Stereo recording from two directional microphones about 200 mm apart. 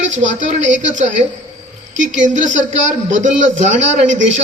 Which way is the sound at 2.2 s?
40° right (ahead or behind).